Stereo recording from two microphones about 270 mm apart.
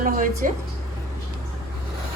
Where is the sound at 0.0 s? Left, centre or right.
Right.